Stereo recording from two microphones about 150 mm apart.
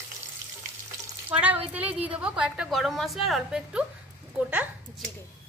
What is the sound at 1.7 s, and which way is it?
A woman's voice, 10° right (ahead or behind).